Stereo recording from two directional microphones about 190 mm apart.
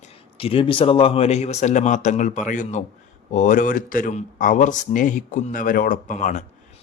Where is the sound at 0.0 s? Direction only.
30° left (ahead or behind).